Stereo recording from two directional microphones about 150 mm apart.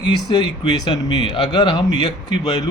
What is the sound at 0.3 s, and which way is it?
A man's voice, 25° left (ahead or behind).